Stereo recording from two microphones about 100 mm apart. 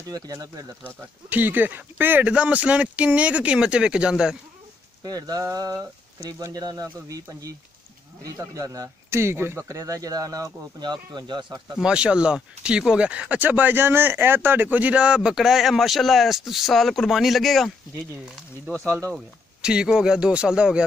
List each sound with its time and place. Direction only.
0.1 s speech: 35° right (ahead or behind)
0.8 s speech: 20° right (ahead or behind)
5.0 s speech: 40° right (ahead or behind)
11.7 s speech: 10° right (ahead or behind)
18.7 s speech: 30° right (ahead or behind)
19.1 s speech: 10° right (ahead or behind)